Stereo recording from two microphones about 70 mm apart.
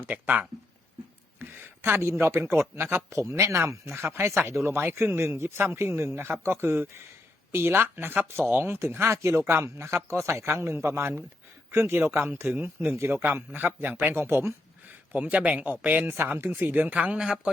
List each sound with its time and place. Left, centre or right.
0.1 s speech: right
15.1 s speech: centre